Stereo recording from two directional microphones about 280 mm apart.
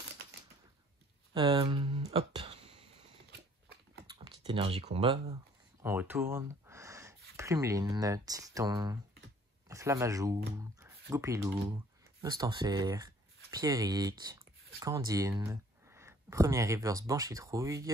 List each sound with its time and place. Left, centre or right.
1.3 s speech: centre
3.3 s a sound: right
4.4 s speech: centre